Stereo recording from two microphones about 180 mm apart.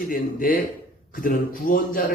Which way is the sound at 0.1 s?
50° left (ahead or behind).